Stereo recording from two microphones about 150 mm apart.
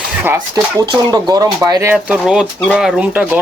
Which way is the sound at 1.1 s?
25° right (ahead or behind).